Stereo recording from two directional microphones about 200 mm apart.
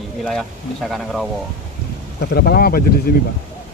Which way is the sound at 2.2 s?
50° left (ahead or behind).